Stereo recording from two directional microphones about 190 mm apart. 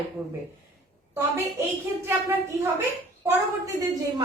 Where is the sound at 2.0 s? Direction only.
10° right (ahead or behind).